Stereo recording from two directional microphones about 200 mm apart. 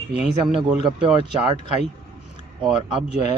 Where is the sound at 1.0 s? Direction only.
25° right (ahead or behind).